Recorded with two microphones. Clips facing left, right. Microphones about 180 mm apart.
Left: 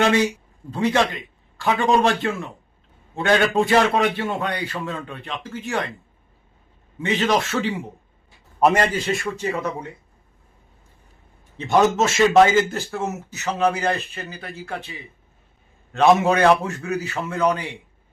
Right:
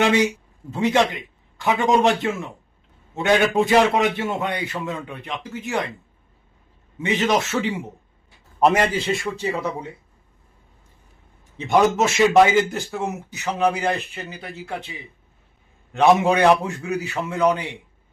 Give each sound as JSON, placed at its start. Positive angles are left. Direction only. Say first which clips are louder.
{"t": 0.0, "sound": "a man's voice", "louder": "even", "side_deg": -15}
{"t": 7.0, "sound": "a man's voice", "louder": "even", "side_deg": -15}
{"t": 8.7, "sound": "a man's voice", "louder": "even", "side_deg": -10}
{"t": 11.5, "sound": "a man's voice", "louder": "even", "side_deg": -15}